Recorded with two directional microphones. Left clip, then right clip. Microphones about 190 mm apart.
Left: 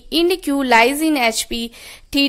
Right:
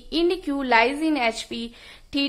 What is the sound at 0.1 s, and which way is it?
A woman's voice, 35° left (ahead or behind).